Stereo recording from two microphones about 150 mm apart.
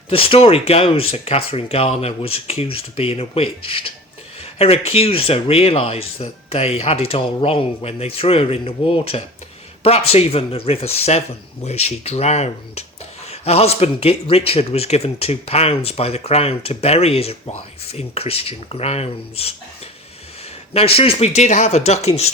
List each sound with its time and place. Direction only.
0.1 s a man's voice: 40° left (ahead or behind)
20.7 s speech: 40° left (ahead or behind)